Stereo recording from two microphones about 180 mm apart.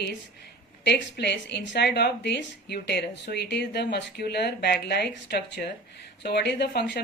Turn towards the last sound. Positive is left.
turn(degrees=65)  # may be behind; listen again after turning